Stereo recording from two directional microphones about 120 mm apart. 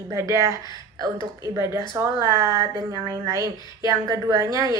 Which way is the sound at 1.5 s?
25° right (ahead or behind).